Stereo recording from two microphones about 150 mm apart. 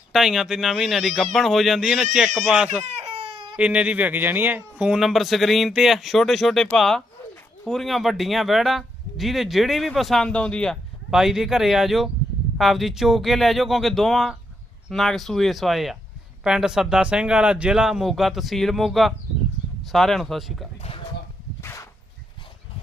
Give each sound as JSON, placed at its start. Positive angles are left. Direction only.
{"t": 0.1, "sound": "speech", "side_deg": -5}
{"t": 2.8, "sound": "baby cry", "side_deg": -45}
{"t": 3.6, "sound": "speech", "side_deg": -10}
{"t": 21.6, "sound": "a sound", "side_deg": 15}